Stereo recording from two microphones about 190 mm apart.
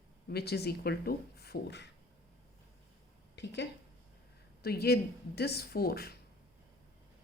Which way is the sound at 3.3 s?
65° left (ahead or behind).